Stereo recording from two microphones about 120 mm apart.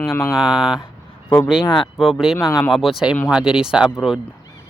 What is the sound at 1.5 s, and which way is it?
Speech, 40° left (ahead or behind).